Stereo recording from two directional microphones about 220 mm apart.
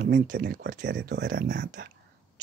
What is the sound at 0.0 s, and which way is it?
Speech, 50° right (ahead or behind).